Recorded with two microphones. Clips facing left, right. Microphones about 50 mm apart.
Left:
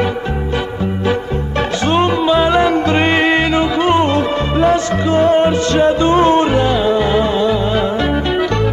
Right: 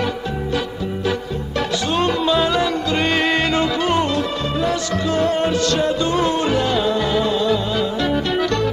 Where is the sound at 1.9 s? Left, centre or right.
Left.